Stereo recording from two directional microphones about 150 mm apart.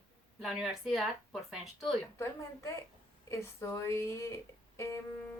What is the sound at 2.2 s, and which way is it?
Speech, 20° left (ahead or behind).